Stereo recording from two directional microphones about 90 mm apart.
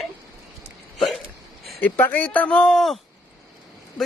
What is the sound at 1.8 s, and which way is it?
Speech, 20° left (ahead or behind).